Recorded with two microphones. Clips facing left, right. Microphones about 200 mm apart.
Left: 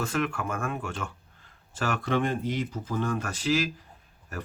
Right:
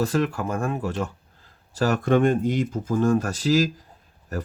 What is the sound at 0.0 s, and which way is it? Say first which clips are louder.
Speech: right 6 dB; 35° right (ahead or behind).